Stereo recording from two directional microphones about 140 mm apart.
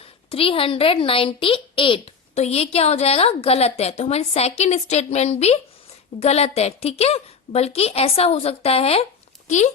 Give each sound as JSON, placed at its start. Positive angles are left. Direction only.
{"t": 0.3, "sound": "a woman's voice", "side_deg": 40}
{"t": 9.5, "sound": "speech", "side_deg": 60}